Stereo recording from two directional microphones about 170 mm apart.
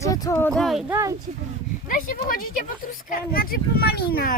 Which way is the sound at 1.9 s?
55° left (ahead or behind).